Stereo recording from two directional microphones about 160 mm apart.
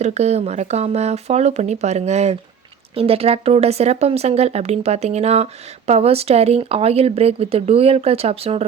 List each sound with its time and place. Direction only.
0.0 s speech: 45° right (ahead or behind)